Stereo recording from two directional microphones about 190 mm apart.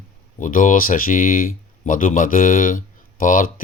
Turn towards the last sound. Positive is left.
turn(degrees=45)  # may be behind; listen again after turning